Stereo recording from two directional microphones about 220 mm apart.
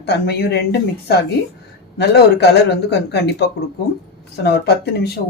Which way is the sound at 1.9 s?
50° left (ahead or behind).